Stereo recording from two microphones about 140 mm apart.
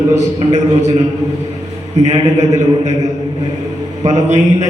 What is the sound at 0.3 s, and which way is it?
Speech, 55° right (ahead or behind).